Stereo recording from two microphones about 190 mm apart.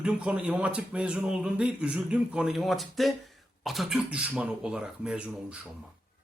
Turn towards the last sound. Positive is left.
turn(degrees=-5)  # may be behind; listen again after turning